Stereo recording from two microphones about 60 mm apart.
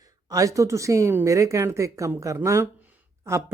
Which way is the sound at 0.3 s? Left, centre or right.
Right.